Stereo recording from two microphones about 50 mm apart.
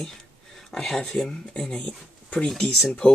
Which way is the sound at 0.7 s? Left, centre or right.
Centre.